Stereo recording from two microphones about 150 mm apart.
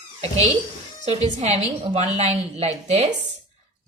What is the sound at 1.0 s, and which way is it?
A woman's voice, 45° right (ahead or behind).